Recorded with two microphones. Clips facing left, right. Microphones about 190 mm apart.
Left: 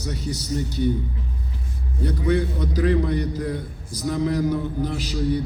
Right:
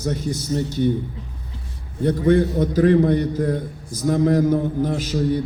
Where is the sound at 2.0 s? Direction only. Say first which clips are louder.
Right 6 dB; 50° right (ahead or behind).